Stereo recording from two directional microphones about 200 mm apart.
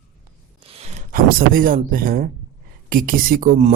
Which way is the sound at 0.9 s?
40° right (ahead or behind).